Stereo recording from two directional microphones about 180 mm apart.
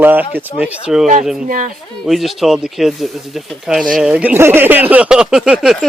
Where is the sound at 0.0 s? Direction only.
10° right (ahead or behind).